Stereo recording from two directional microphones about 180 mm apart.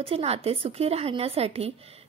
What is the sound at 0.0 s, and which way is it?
Speech, 35° right (ahead or behind).